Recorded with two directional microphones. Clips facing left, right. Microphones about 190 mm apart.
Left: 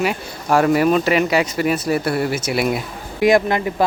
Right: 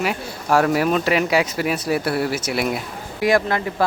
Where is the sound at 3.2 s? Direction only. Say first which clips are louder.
Left 4 dB; 20° left (ahead or behind).